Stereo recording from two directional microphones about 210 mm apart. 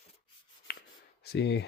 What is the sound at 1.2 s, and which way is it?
Speech, 55° left (ahead or behind).